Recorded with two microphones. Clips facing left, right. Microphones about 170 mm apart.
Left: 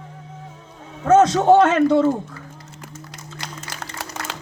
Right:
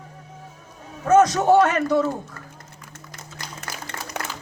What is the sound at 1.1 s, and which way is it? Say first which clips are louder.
A woman's voice: left 2 dB; 25° left (ahead or behind).